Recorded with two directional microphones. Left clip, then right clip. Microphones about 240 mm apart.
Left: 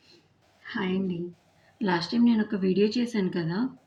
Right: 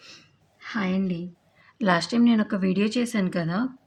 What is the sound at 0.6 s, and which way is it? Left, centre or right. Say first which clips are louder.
A woman's voice: right 2 dB; right.